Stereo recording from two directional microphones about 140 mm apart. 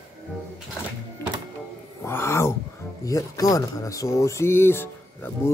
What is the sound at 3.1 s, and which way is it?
Speech, 25° left (ahead or behind).